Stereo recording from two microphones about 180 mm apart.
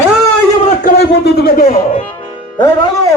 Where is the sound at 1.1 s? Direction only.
65° left (ahead or behind).